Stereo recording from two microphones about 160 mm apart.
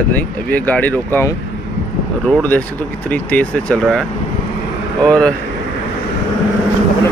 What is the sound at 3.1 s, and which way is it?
Speech, 10° left (ahead or behind).